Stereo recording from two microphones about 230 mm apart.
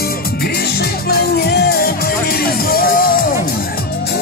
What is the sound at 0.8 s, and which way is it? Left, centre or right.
Music, left.